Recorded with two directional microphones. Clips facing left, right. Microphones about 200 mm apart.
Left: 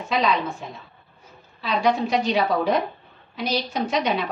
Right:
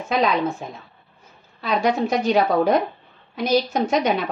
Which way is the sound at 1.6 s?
50° right (ahead or behind).